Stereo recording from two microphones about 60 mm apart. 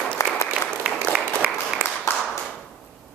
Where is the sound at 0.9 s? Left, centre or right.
Centre.